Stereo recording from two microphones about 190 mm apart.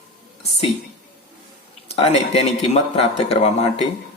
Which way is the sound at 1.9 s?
35° left (ahead or behind).